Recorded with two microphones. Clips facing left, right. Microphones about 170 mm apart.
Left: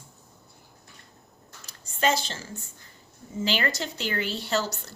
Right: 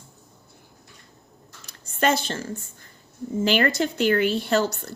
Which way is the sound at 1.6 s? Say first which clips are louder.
Right 3 dB; 55° right (ahead or behind).